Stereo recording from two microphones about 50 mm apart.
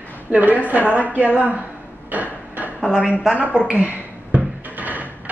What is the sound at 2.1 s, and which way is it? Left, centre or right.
Hammer, right.